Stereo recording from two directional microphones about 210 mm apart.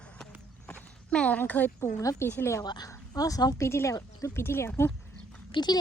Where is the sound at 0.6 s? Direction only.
5° left (ahead or behind).